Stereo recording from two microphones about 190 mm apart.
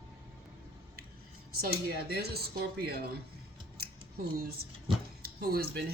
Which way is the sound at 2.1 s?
55° right (ahead or behind).